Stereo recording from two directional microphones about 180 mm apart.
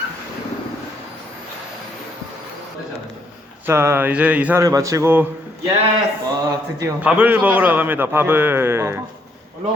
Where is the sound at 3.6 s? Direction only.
15° right (ahead or behind).